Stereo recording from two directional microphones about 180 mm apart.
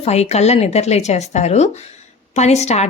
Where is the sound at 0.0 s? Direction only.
35° left (ahead or behind).